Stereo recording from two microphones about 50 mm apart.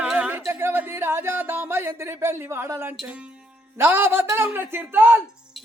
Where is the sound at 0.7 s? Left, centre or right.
Right.